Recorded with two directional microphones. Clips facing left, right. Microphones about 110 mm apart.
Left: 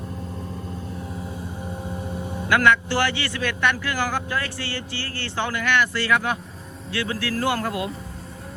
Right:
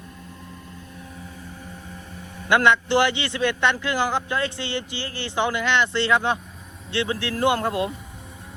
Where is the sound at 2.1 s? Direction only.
30° left (ahead or behind).